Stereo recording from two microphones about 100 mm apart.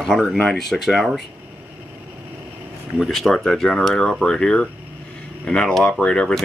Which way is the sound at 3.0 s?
Centre (ahead or behind).